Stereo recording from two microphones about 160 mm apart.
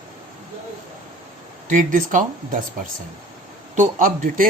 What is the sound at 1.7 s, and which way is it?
Speech, 55° right (ahead or behind).